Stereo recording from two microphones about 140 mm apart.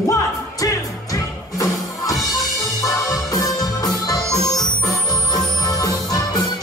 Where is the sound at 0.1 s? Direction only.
25° left (ahead or behind).